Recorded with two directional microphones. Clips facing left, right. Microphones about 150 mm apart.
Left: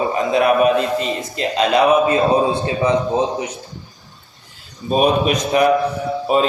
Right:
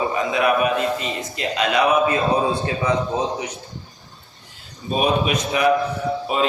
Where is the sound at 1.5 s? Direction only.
30° left (ahead or behind).